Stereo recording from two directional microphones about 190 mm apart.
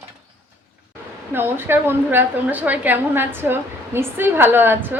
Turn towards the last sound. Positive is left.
turn(degrees=-10)  # may be behind; listen again after turning